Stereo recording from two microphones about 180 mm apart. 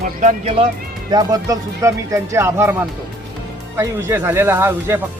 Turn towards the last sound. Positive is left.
turn(degrees=-15)  # may be behind; listen again after turning